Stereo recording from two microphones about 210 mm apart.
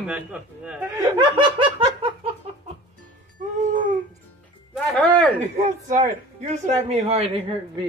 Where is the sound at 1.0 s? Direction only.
20° right (ahead or behind).